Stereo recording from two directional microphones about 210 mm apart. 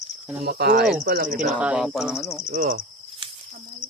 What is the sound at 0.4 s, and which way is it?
Cricket, 50° right (ahead or behind).